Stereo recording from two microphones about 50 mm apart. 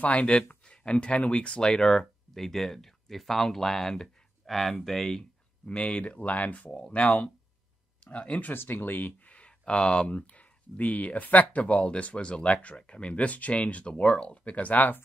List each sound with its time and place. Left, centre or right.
0.0 s speech: left; by 5.2 s centre
5.7 s speech: centre
8.5 s speech: left